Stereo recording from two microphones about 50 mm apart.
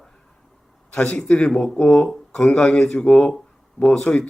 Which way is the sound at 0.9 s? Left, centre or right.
Left.